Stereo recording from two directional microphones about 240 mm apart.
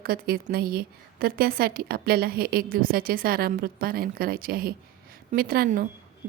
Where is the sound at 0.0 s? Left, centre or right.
Right.